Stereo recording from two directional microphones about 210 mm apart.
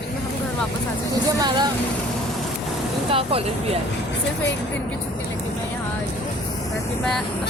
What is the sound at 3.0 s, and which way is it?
Speech, 25° right (ahead or behind).